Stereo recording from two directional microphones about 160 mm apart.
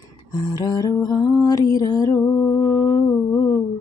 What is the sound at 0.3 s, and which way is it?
Music, 25° left (ahead or behind).